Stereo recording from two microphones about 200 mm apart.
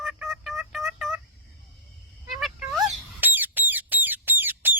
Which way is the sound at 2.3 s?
Centre (ahead or behind).